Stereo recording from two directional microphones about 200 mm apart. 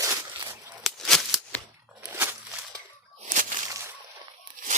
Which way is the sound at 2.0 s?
10° right (ahead or behind).